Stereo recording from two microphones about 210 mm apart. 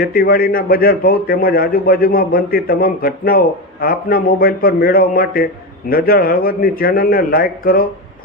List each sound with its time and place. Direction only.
0.0 s a man's voice: 45° left (ahead or behind)